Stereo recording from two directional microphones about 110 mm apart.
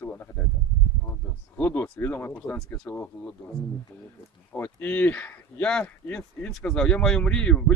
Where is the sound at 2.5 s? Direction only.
5° left (ahead or behind).